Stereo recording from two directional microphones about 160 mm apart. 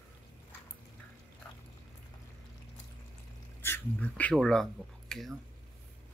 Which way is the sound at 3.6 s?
10° left (ahead or behind).